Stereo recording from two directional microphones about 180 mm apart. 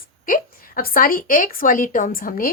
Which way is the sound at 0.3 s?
50° left (ahead or behind).